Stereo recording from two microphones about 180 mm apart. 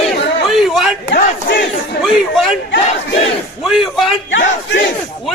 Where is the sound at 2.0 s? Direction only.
Centre (ahead or behind).